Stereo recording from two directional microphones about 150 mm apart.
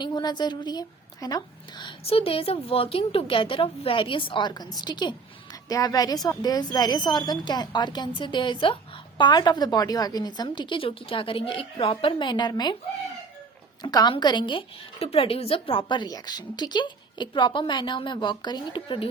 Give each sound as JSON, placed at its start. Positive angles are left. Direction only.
{"t": 0.0, "sound": "a woman's voice", "side_deg": 25}
{"t": 2.0, "sound": "a woman's voice", "side_deg": 40}
{"t": 13.8, "sound": "a woman's voice", "side_deg": 30}
{"t": 15.9, "sound": "a woman's voice", "side_deg": 30}